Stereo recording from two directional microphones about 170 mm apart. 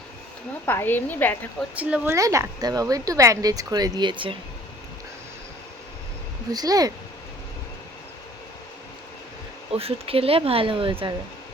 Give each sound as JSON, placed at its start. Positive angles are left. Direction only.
{"t": 0.6, "sound": "a woman's voice", "side_deg": 15}
{"t": 1.7, "sound": "speech", "side_deg": -10}
{"t": 2.1, "sound": "speech", "side_deg": -20}
{"t": 6.5, "sound": "speech", "side_deg": -20}
{"t": 9.7, "sound": "speech", "side_deg": -35}